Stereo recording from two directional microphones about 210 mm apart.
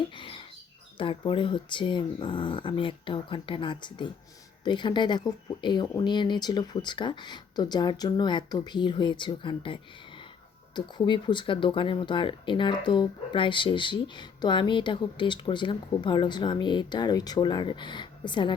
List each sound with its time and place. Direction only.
0.2 s rodents: 25° left (ahead or behind)
0.9 s speech: 25° left (ahead or behind)